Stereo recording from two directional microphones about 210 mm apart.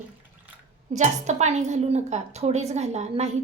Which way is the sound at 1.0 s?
35° right (ahead or behind).